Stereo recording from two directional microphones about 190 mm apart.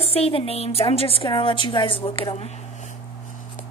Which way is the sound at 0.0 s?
30° left (ahead or behind).